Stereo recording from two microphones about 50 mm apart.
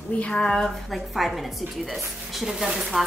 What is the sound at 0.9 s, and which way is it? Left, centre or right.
Speech, centre.